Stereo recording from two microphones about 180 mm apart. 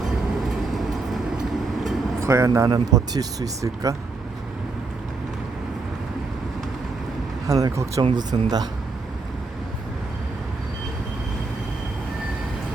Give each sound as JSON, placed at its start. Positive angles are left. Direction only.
{"t": 2.2, "sound": "speech", "side_deg": -15}
{"t": 7.4, "sound": "speech", "side_deg": -15}